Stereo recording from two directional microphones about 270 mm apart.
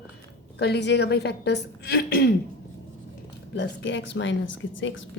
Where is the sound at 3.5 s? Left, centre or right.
Left.